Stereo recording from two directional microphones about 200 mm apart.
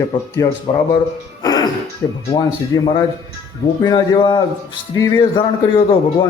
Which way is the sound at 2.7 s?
15° left (ahead or behind).